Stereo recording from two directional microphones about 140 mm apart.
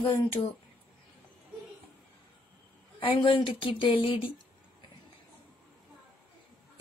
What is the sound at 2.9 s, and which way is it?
A woman's voice, 40° left (ahead or behind).